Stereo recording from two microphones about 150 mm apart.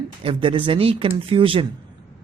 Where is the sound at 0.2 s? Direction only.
35° right (ahead or behind).